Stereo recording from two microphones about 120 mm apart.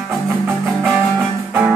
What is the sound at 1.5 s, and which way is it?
Music, 10° right (ahead or behind).